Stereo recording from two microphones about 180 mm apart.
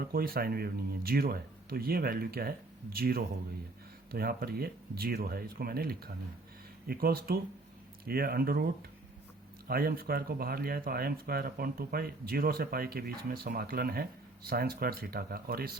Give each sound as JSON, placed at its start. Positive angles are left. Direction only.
{"t": 0.0, "sound": "speech", "side_deg": -55}